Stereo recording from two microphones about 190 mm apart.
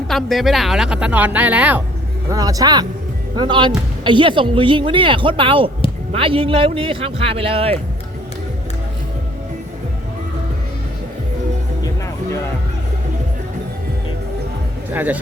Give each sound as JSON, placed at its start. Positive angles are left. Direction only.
{"t": 0.1, "sound": "speech", "side_deg": 0}
{"t": 2.3, "sound": "speech", "side_deg": -20}
{"t": 14.9, "sound": "speech", "side_deg": -10}